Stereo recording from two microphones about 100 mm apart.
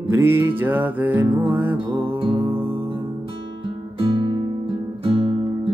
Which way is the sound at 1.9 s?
60° right (ahead or behind).